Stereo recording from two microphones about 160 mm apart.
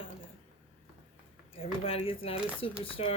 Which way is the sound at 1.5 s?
35° left (ahead or behind).